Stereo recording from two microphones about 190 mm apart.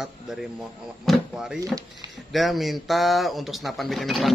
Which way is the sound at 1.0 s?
Centre (ahead or behind).